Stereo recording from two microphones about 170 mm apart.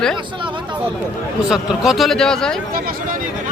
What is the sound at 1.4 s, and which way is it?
Speech, 5° right (ahead or behind).